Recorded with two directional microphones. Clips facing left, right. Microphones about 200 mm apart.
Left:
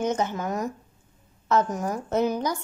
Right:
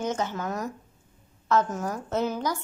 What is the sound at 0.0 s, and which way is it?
A woman's voice, 20° left (ahead or behind).